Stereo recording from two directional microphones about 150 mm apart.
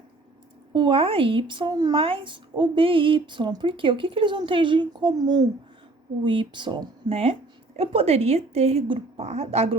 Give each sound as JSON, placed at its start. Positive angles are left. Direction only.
{"t": 0.7, "sound": "a woman's voice", "side_deg": -35}